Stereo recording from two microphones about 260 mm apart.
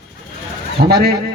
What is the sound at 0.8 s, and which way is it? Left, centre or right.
Bird, right.